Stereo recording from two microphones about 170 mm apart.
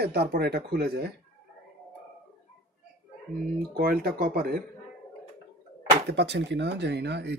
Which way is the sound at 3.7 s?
65° right (ahead or behind).